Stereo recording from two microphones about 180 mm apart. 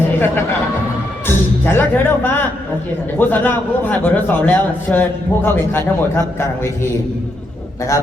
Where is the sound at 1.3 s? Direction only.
10° left (ahead or behind).